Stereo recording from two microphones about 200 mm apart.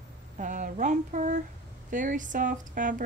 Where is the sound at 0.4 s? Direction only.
40° right (ahead or behind).